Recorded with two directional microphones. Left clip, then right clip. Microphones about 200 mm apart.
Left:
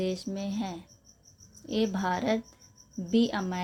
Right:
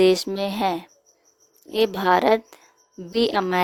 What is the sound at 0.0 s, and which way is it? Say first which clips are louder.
A woman's voice: right 15 dB; 55° right (ahead or behind).